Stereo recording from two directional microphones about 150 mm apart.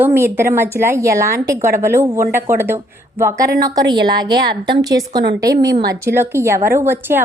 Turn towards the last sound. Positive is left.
turn(degrees=-15)  # may be behind; listen again after turning